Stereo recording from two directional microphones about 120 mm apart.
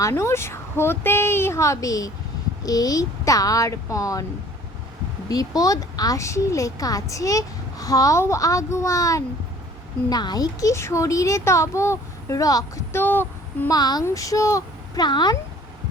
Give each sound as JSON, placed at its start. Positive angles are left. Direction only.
{"t": 0.0, "sound": "speech", "side_deg": 25}
{"t": 5.3, "sound": "speech", "side_deg": 30}
{"t": 13.7, "sound": "speech", "side_deg": 35}